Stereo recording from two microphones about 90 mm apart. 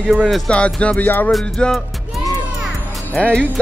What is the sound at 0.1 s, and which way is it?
Speech, 5° right (ahead or behind).